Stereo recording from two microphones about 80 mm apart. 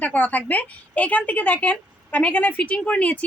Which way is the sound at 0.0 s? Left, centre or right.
Left.